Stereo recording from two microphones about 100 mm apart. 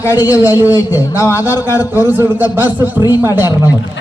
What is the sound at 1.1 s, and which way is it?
Speech, 30° left (ahead or behind).